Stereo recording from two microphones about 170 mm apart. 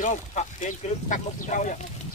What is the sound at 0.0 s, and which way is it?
Speech, 45° left (ahead or behind).